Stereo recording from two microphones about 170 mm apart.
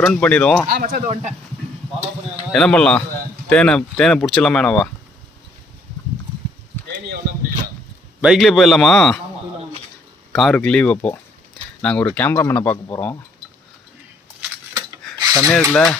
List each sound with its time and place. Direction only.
0.0 s speech: 5° left (ahead or behind)
0.7 s speech: 65° right (ahead or behind)
2.5 s speech: 5° left (ahead or behind)
8.2 s speech: centre (ahead or behind)
10.3 s speech: 5° left (ahead or behind)
14.7 s a sound: 25° right (ahead or behind)
15.3 s speech: 10° left (ahead or behind)